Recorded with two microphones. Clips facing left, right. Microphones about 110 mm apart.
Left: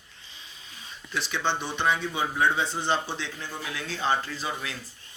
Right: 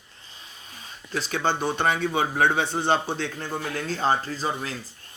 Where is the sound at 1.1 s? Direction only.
40° right (ahead or behind).